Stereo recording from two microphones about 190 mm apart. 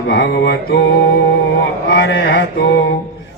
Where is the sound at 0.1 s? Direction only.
65° left (ahead or behind).